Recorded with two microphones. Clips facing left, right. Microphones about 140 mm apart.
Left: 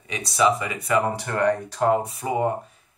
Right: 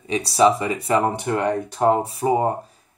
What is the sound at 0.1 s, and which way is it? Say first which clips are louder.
Speech: right 4 dB; 30° right (ahead or behind).